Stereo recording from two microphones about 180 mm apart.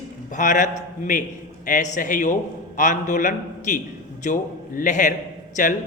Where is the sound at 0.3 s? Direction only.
45° left (ahead or behind).